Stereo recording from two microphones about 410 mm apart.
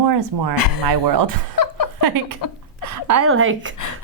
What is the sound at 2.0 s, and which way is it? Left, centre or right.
A woman's voice, right.